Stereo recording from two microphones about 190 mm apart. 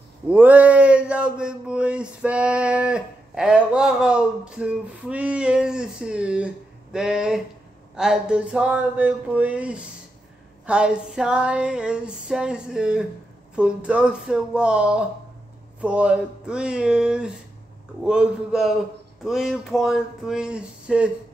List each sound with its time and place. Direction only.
0.3 s speech: 10° right (ahead or behind)
10.7 s female singing: 5° right (ahead or behind)